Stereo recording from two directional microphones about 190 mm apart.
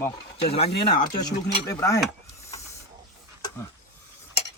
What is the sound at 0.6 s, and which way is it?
Speech, 60° left (ahead or behind).